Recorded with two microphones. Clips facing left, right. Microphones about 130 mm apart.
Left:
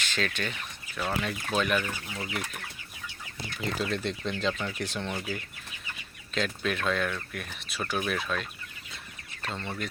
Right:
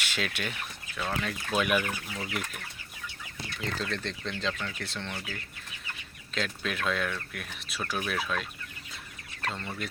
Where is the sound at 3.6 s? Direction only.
10° left (ahead or behind).